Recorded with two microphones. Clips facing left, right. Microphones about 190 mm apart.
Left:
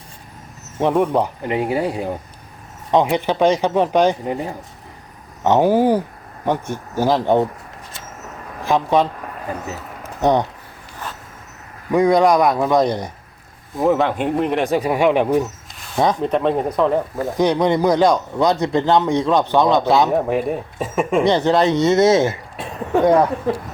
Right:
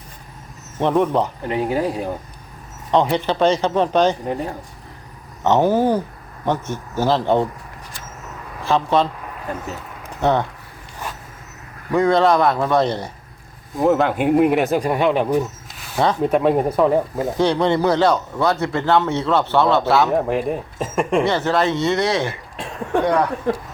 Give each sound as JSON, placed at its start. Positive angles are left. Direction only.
{"t": 0.8, "sound": "speech", "side_deg": 10}
{"t": 5.4, "sound": "speech", "side_deg": 10}
{"t": 8.6, "sound": "a man's voice", "side_deg": 15}
{"t": 10.0, "sound": "a sound", "side_deg": 15}
{"t": 11.9, "sound": "speech", "side_deg": 15}
{"t": 13.7, "sound": "speech", "side_deg": 0}
{"t": 16.2, "sound": "speech", "side_deg": -5}
{"t": 17.3, "sound": "speech", "side_deg": 10}
{"t": 20.1, "sound": "speech", "side_deg": 0}
{"t": 21.2, "sound": "speech", "side_deg": 20}